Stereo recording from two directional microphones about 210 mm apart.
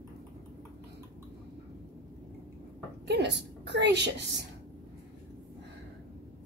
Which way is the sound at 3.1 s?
55° right (ahead or behind).